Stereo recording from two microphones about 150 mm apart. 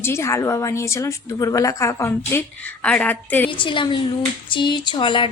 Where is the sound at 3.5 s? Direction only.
35° left (ahead or behind).